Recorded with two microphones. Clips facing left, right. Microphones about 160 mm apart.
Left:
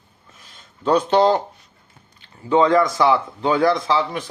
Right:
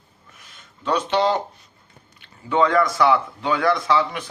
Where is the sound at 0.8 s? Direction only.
40° left (ahead or behind).